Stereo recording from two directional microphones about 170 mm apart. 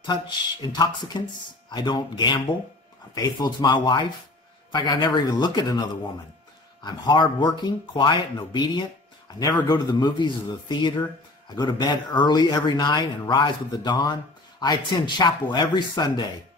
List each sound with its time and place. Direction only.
0.0 s speech: 25° left (ahead or behind)